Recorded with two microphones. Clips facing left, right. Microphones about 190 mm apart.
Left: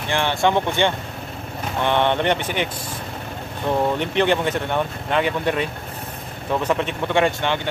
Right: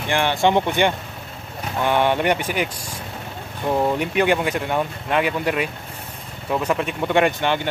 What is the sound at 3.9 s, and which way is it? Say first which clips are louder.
Speech: even; 10° right (ahead or behind).